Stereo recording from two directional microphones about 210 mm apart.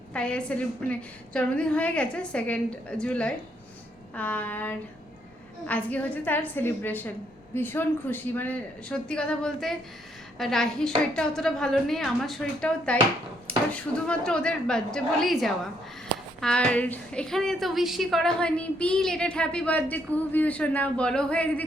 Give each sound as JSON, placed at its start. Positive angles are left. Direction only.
{"t": 0.1, "sound": "a woman's voice", "side_deg": 5}